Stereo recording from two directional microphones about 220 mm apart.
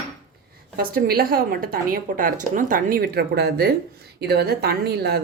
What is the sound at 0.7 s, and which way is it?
A woman's voice, 40° right (ahead or behind).